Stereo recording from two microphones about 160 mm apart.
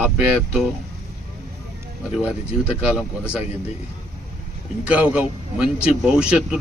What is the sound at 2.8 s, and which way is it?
Speech, 5° right (ahead or behind).